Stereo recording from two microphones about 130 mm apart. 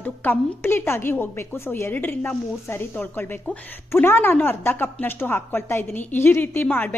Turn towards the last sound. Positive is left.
turn(degrees=15)  # may be behind; listen again after turning